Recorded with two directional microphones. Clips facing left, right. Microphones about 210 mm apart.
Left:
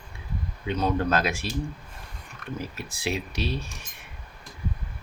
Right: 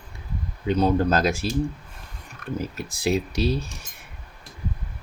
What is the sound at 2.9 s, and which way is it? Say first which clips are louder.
Speech: right 8 dB; 40° right (ahead or behind).